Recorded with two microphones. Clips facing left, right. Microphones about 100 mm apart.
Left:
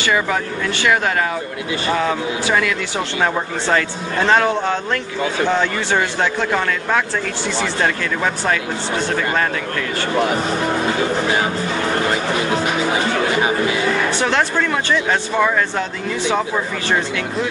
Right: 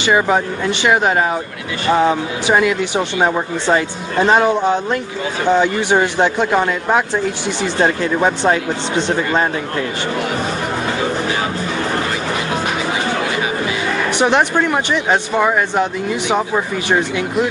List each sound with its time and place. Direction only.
0.0 s speech: 25° right (ahead or behind)
14.1 s speech: 20° right (ahead or behind)